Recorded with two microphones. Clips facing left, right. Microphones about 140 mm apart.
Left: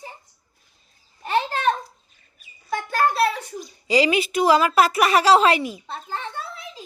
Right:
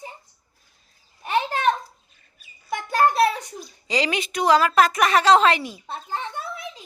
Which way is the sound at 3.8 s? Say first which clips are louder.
Left 5 dB; 10° left (ahead or behind).